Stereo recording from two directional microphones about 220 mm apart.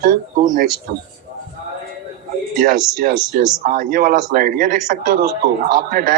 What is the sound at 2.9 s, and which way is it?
A man's voice, 40° right (ahead or behind).